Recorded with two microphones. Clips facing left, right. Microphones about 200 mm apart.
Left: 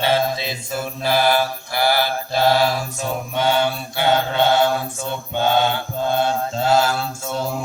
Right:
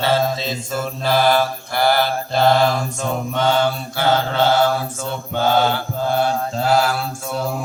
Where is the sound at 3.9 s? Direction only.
15° left (ahead or behind).